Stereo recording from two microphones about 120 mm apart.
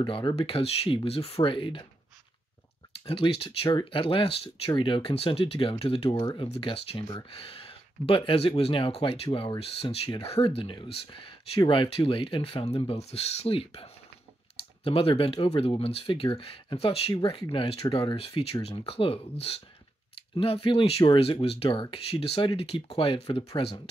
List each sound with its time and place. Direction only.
0.0 s speech: 40° left (ahead or behind)
0.4 s speech: 55° left (ahead or behind)
3.1 s speech: 50° left (ahead or behind)
6.1 s speech: 40° left (ahead or behind)
17.1 s speech: 40° left (ahead or behind)
17.5 s speech: 50° left (ahead or behind)